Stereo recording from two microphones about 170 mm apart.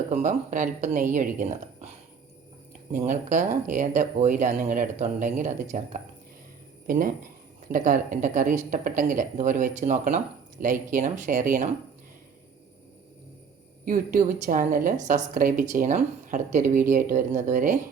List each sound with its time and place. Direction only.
0.1 s speech: 45° right (ahead or behind)
2.9 s speech: 45° right (ahead or behind)
13.8 s speech: 50° right (ahead or behind)